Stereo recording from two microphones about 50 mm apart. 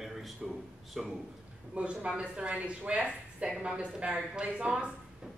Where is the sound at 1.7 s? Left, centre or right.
Right.